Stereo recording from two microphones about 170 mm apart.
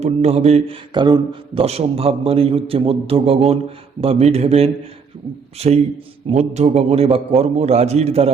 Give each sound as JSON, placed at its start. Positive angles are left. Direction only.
{"t": 0.0, "sound": "speech", "side_deg": -40}